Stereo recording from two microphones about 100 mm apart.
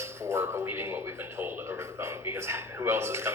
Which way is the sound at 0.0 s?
30° right (ahead or behind).